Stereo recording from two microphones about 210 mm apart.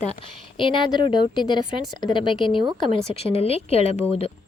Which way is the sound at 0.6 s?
25° left (ahead or behind).